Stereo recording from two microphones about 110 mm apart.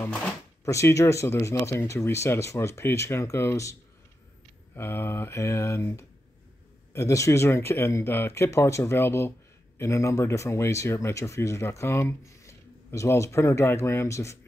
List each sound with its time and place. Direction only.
0.7 s speech: 25° left (ahead or behind)
4.7 s speech: 20° left (ahead or behind)